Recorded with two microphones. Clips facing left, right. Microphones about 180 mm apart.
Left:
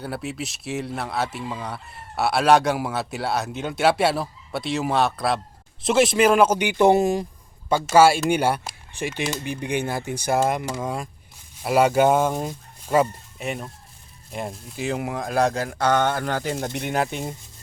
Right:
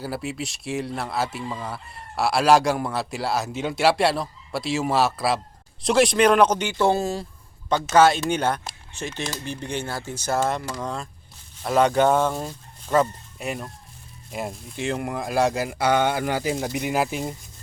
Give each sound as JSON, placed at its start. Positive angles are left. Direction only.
{"t": 0.0, "sound": "speech", "side_deg": 0}
{"t": 13.4, "sound": "speech", "side_deg": 0}